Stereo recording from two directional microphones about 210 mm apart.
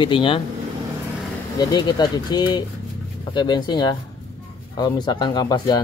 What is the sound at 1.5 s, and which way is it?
Speech, 20° left (ahead or behind).